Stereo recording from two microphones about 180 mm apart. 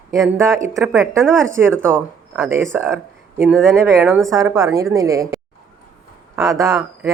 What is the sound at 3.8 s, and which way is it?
Speech, 15° right (ahead or behind).